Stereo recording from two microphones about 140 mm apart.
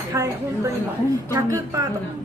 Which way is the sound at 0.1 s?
20° right (ahead or behind).